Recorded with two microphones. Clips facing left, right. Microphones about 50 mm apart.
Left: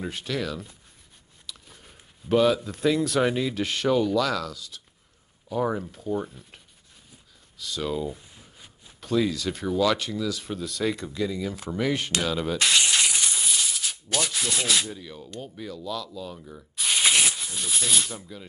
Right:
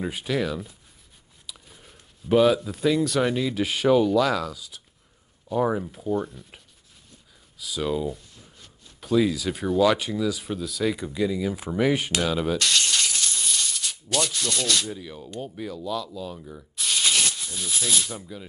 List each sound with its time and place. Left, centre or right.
0.0 s speech: centre
3.5 s speech: centre
6.1 s speech: centre
7.5 s speech: centre
8.2 s a sound: centre
9.0 s speech: centre
12.5 s a sound: centre
14.9 s speech: centre
16.8 s a sound: centre